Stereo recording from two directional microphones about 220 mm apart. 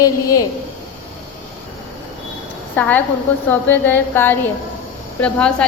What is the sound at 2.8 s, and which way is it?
A woman's voice, 5° left (ahead or behind).